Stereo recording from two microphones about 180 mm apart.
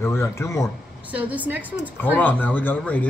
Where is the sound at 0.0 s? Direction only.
15° left (ahead or behind).